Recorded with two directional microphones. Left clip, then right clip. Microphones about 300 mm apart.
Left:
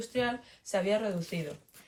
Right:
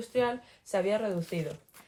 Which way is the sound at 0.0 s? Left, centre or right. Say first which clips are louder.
Right 3 dB; right.